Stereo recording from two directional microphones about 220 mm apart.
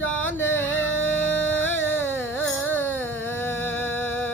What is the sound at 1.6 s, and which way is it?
Carnatic music, 10° left (ahead or behind).